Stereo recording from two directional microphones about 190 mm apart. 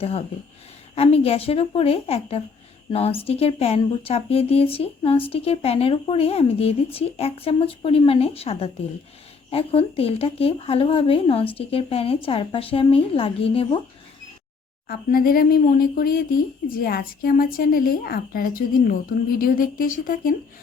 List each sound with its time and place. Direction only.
0.9 s speech: 30° left (ahead or behind)
14.8 s a woman's voice: 50° left (ahead or behind)